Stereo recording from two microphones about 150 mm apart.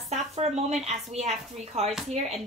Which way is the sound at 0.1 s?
45° right (ahead or behind).